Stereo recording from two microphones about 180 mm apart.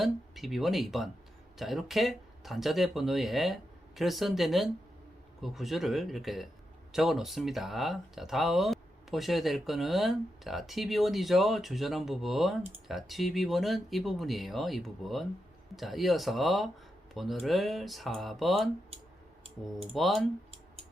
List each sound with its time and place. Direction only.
0.0 s speech: centre (ahead or behind)